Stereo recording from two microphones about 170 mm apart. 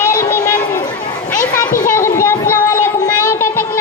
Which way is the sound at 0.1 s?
20° left (ahead or behind).